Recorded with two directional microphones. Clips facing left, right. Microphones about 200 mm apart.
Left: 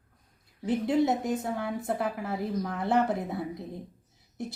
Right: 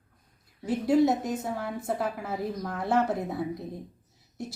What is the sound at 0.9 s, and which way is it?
Speech, centre (ahead or behind).